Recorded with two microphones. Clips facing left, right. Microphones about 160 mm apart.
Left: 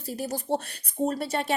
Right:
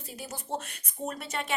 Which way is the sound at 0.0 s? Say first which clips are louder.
Left 9 dB; 40° left (ahead or behind).